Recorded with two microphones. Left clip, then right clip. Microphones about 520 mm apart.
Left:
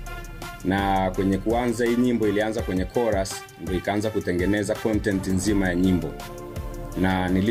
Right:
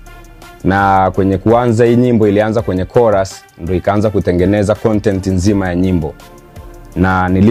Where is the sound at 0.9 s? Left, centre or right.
Right.